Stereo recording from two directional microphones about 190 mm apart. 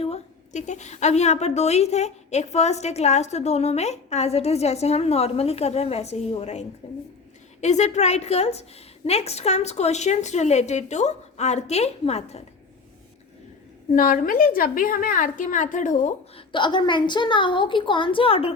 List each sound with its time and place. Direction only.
0.0 s a woman's voice: 35° left (ahead or behind)
13.9 s a woman's voice: 45° left (ahead or behind)
16.5 s a woman's voice: 25° left (ahead or behind)